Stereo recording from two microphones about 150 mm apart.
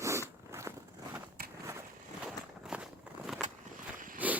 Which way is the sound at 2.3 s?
5° right (ahead or behind).